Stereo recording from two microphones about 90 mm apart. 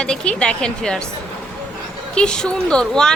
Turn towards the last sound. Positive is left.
turn(degrees=10)  # may be behind; listen again after turning